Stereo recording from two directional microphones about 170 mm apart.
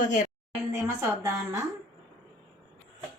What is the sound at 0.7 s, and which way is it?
Speech, 20° right (ahead or behind).